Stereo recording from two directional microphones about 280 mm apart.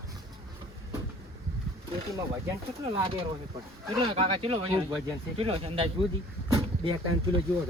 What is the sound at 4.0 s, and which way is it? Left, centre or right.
Speech, centre.